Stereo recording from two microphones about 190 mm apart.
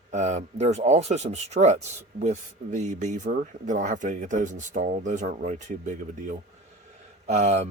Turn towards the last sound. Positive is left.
turn(degrees=-35)  # may be behind; listen again after turning